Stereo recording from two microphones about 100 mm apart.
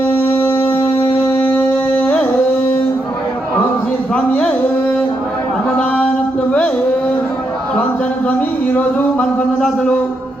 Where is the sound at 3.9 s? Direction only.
10° left (ahead or behind).